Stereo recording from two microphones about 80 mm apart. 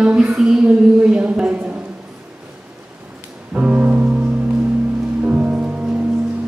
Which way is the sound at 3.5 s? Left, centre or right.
Centre.